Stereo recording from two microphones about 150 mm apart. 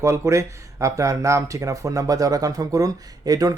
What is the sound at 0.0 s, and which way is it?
Speech, 20° right (ahead or behind).